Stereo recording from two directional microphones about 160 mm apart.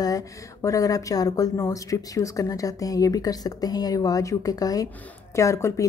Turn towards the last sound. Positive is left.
turn(degrees=20)  # may be behind; listen again after turning